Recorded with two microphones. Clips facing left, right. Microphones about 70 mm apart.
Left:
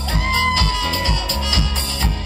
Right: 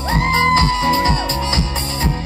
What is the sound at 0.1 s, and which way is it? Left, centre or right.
Music, right.